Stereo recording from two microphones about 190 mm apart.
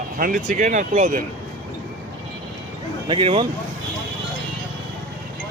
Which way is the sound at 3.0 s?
30° right (ahead or behind).